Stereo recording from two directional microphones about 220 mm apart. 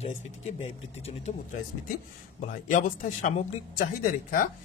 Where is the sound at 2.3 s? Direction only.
35° left (ahead or behind).